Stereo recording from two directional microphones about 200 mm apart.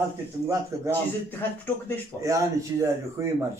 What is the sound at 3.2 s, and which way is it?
Speech, 15° right (ahead or behind).